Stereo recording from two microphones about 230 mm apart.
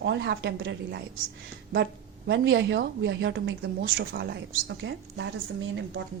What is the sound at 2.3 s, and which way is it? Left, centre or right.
Speech, right.